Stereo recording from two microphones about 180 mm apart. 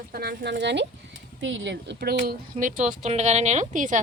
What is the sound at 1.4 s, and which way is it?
Speech, 90° right.